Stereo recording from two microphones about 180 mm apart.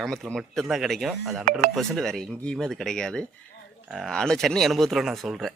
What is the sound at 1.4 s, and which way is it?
Speech, 50° right (ahead or behind).